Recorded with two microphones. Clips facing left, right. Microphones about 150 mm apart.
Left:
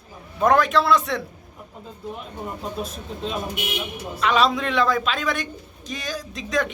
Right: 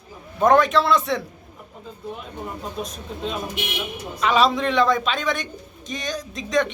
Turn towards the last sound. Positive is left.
turn(degrees=0)  # may be behind; listen again after turning